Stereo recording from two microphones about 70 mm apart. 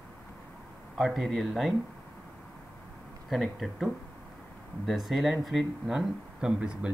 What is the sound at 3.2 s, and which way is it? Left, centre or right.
Speech, centre.